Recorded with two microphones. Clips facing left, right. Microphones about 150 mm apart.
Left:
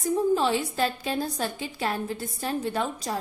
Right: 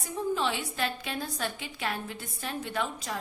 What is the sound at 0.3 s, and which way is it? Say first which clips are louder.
Speech: left 6 dB; 40° left (ahead or behind).